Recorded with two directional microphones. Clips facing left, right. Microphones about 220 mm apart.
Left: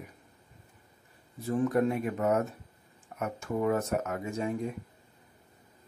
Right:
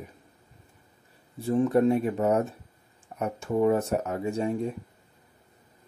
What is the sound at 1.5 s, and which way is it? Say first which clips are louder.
Speech: right 5 dB; 30° right (ahead or behind).